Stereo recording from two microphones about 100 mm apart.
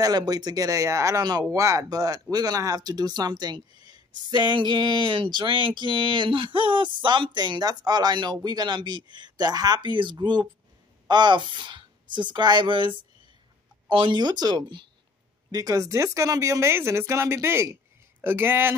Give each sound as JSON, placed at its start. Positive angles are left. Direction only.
{"t": 0.0, "sound": "speech", "side_deg": -40}
{"t": 15.5, "sound": "speech", "side_deg": -35}